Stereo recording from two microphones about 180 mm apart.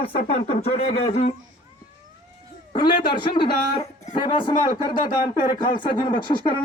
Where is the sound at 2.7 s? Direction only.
25° left (ahead or behind).